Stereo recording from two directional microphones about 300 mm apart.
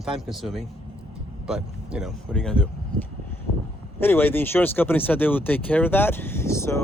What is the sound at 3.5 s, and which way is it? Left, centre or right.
Vehicle, left.